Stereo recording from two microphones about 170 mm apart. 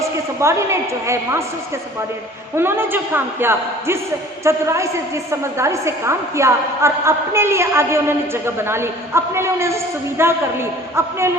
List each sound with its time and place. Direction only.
0.0 s a man's voice: 15° right (ahead or behind)